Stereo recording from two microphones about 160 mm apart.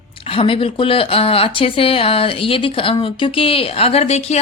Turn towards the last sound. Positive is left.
turn(degrees=40)  # may be behind; listen again after turning